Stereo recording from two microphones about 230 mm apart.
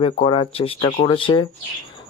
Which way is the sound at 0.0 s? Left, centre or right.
Left.